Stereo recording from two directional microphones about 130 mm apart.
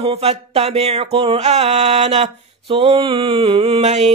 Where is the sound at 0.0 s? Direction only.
50° right (ahead or behind).